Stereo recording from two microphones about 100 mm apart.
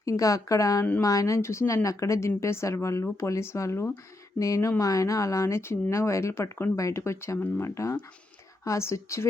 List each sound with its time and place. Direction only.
0.0 s speech: 35° left (ahead or behind)